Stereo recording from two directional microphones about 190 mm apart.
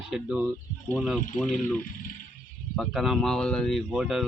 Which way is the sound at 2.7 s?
Centre (ahead or behind).